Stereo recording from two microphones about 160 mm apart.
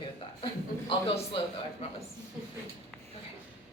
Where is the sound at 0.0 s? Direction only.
30° left (ahead or behind).